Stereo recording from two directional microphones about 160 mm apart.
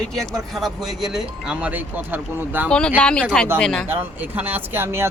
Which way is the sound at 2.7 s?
5° left (ahead or behind).